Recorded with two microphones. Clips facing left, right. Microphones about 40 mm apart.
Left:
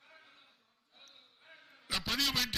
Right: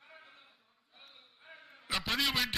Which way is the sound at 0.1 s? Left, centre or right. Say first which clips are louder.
Right 4 dB; centre.